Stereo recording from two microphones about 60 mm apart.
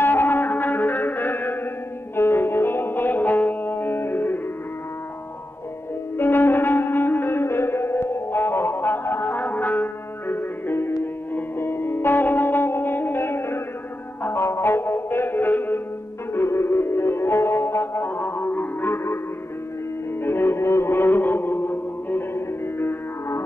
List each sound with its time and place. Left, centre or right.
0.0 s music: left
6.1 s music: left
16.3 s music: left
20.2 s music: left